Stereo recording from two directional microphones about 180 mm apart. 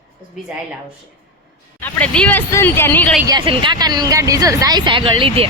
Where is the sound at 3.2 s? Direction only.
25° right (ahead or behind).